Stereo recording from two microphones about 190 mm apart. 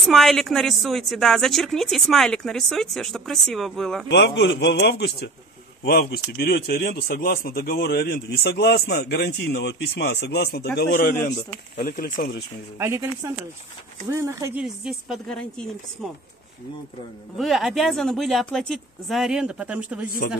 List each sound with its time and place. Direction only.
0.1 s a woman's voice: centre (ahead or behind)
4.1 s a man's voice: 65° left (ahead or behind); by 11.3 s 45° left (ahead or behind)
12.0 s speech: 55° left (ahead or behind)
12.7 s speech: 15° right (ahead or behind)
14.1 s speech: 15° right (ahead or behind)
14.6 s a woman's voice: centre (ahead or behind)
17.4 s a woman's voice: centre (ahead or behind)